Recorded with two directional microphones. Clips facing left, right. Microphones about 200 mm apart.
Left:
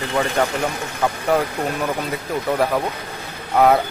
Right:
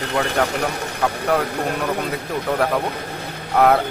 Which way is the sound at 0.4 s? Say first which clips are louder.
Even; 5° right (ahead or behind).